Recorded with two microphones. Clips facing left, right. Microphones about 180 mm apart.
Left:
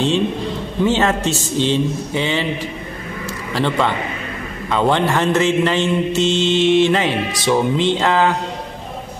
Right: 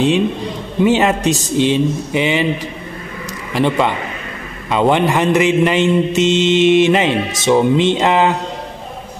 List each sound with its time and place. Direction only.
0.8 s a man's voice: 15° right (ahead or behind)
3.5 s a man's voice: 15° right (ahead or behind)